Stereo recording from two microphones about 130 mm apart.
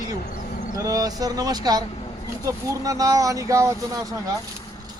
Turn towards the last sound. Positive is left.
turn(degrees=-25)  # may be behind; listen again after turning